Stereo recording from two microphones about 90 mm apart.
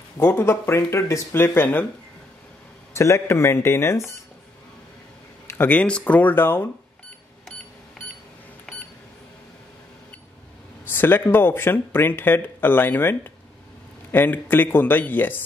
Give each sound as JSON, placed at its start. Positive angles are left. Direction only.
{"t": 0.2, "sound": "speech", "side_deg": 25}
{"t": 2.9, "sound": "speech", "side_deg": 30}
{"t": 5.5, "sound": "speech", "side_deg": 20}
{"t": 8.7, "sound": "a sound", "side_deg": 5}
{"t": 10.9, "sound": "speech", "side_deg": 25}